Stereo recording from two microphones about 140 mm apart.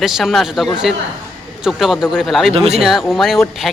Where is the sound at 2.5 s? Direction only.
45° right (ahead or behind).